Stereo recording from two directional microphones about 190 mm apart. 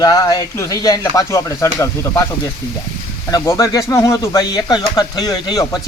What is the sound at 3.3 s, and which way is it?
Speech, 20° left (ahead or behind).